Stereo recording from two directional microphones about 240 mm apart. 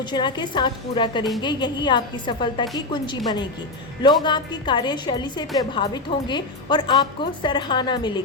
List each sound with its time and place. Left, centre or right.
0.0 s a woman's voice: centre